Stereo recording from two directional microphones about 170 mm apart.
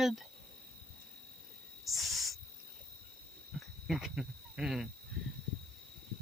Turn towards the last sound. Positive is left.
turn(degrees=0)  # may be behind; listen again after turning